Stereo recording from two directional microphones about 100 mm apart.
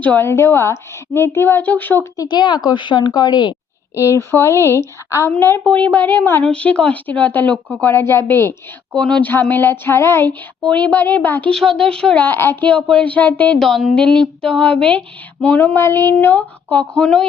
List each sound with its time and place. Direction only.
0.0 s a woman's voice: 20° left (ahead or behind)
2.1 s a woman's voice: 45° left (ahead or behind)
4.1 s a woman's voice: 25° left (ahead or behind)
4.5 s speech: 30° right (ahead or behind)
5.4 s a woman's voice: 20° left (ahead or behind)
6.4 s a woman's voice: 10° left (ahead or behind)
9.0 s a woman's voice: 10° left (ahead or behind); by 10.3 s 25° left (ahead or behind)
10.6 s a woman's voice: 15° left (ahead or behind)
12.2 s a woman's voice: 20° left (ahead or behind)
13.6 s a woman's voice: centre (ahead or behind)
17.0 s speech: 5° left (ahead or behind)